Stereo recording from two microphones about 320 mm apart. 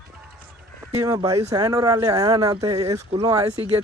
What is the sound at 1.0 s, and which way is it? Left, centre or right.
Speech, centre.